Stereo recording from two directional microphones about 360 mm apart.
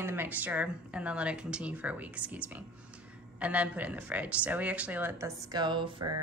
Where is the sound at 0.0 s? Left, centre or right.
Centre.